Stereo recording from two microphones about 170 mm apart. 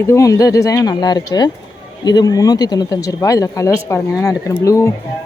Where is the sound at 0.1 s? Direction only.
20° left (ahead or behind).